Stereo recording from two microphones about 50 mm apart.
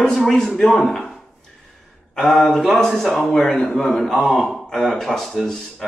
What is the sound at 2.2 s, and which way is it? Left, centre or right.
A man's voice, centre.